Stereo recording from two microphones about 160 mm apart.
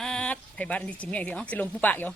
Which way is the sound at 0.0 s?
5° left (ahead or behind).